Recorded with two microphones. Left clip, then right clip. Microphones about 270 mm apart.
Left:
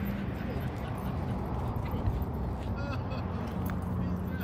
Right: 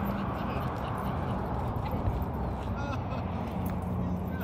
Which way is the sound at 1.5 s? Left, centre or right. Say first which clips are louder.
Right 3 dB; right.